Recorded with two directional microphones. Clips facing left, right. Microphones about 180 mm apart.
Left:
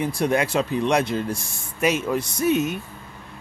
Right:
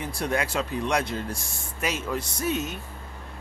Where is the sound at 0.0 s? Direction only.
20° left (ahead or behind).